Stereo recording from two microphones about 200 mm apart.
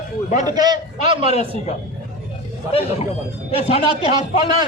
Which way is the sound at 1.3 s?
30° left (ahead or behind).